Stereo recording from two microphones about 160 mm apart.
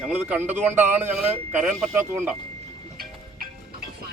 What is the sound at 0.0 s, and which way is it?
Speech, 10° right (ahead or behind).